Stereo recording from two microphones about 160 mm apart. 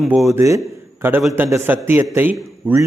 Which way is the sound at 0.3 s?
20° right (ahead or behind).